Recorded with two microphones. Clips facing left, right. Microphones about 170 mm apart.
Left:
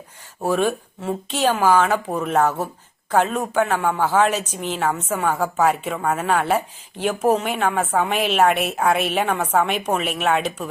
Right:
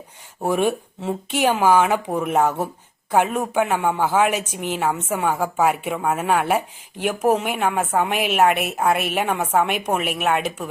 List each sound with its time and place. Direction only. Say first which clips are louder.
0.4 s a woman's voice: even; 20° right (ahead or behind)